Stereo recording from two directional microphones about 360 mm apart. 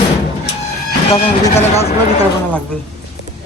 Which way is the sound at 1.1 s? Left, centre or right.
Centre.